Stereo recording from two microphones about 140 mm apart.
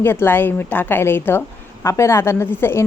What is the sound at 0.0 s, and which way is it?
A woman's voice, 15° left (ahead or behind).